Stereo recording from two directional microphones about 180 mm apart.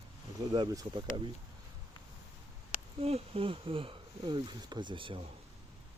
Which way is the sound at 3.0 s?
30° right (ahead or behind).